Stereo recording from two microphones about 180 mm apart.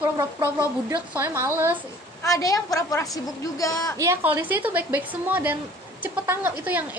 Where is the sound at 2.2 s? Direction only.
20° left (ahead or behind).